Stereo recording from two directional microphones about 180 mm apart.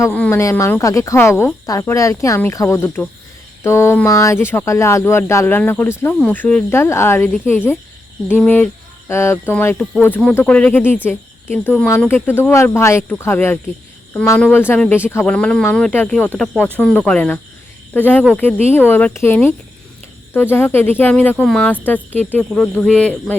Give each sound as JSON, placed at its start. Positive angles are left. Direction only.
{"t": 0.0, "sound": "a woman's voice", "side_deg": 10}